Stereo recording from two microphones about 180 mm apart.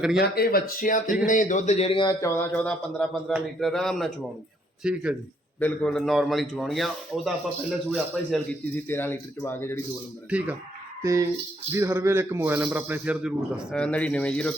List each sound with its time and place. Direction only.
0.2 s a man's voice: 60° left (ahead or behind); by 2.1 s 30° left (ahead or behind)
2.2 s a man's voice: 10° left (ahead or behind); by 5.1 s 5° right (ahead or behind)
5.5 s a man's voice: 5° left (ahead or behind)
8.3 s speech: 10° left (ahead or behind)
10.2 s a man's voice: 10° right (ahead or behind)